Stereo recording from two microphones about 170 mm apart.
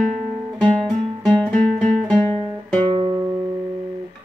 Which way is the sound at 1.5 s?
45° right (ahead or behind).